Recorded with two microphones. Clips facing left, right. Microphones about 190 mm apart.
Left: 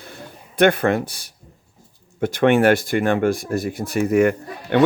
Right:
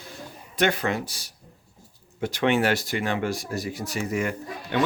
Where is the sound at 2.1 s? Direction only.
55° left (ahead or behind).